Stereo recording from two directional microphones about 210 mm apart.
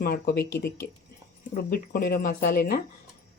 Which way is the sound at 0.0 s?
45° left (ahead or behind).